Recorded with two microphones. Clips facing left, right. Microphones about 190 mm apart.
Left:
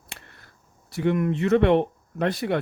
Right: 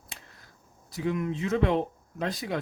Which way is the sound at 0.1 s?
65° left (ahead or behind).